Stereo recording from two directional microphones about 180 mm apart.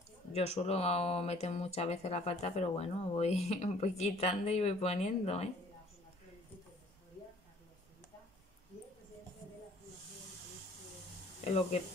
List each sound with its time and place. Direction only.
0.3 s speech: 35° left (ahead or behind)
11.4 s speech: 35° left (ahead or behind)